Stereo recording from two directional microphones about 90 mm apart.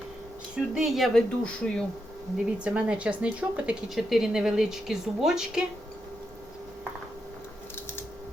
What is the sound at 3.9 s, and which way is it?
Speech, 5° right (ahead or behind).